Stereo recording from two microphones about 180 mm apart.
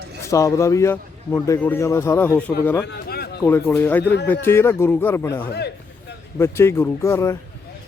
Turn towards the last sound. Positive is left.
turn(degrees=15)  # may be behind; listen again after turning